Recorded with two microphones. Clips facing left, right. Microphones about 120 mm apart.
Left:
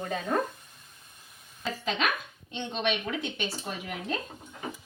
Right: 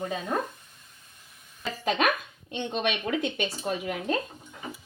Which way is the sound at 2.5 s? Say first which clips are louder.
Right 1 dB; 55° right (ahead or behind).